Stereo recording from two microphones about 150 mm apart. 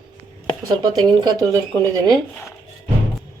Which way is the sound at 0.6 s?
30° right (ahead or behind).